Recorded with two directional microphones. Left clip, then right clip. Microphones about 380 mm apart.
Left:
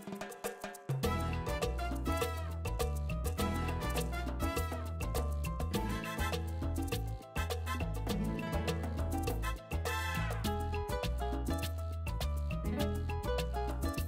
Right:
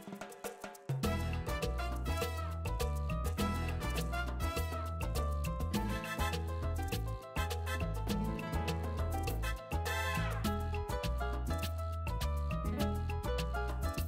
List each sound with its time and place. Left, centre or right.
1.0 s music: left
5.7 s music: left
10.4 s music: left
12.6 s music: left